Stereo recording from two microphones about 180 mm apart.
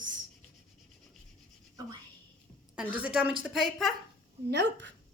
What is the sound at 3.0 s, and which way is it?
Speech, 5° right (ahead or behind).